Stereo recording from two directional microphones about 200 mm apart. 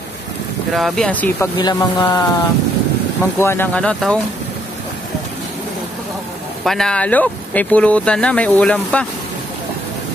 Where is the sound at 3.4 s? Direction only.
10° left (ahead or behind).